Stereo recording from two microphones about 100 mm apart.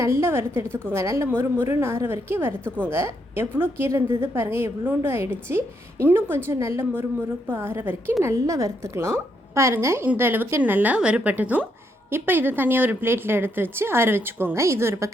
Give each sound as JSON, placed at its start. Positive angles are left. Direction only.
{"t": 0.0, "sound": "a woman's voice", "side_deg": -25}